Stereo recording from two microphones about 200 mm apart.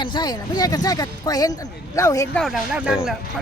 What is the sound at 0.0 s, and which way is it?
Speech, 20° left (ahead or behind).